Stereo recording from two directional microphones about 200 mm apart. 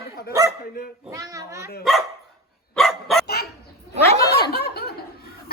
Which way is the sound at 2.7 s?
Centre (ahead or behind).